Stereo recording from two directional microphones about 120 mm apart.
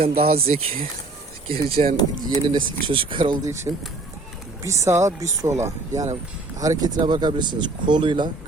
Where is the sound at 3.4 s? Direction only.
25° right (ahead or behind).